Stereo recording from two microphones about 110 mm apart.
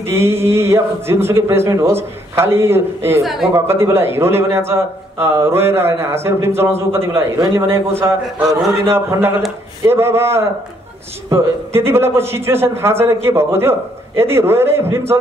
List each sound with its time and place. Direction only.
0.0 s a man's voice: 25° right (ahead or behind)
3.2 s speech: centre (ahead or behind)
3.5 s a man's voice: 25° right (ahead or behind)